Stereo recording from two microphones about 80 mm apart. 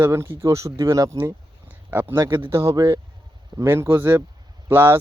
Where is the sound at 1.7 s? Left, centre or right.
Right.